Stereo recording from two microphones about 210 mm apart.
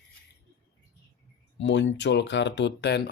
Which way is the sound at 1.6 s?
60° left (ahead or behind).